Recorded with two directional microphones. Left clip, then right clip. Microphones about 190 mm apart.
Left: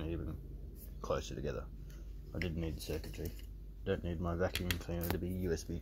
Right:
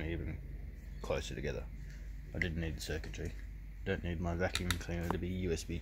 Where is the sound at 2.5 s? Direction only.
10° right (ahead or behind).